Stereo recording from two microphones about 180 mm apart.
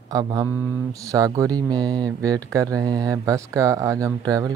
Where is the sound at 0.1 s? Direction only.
20° right (ahead or behind).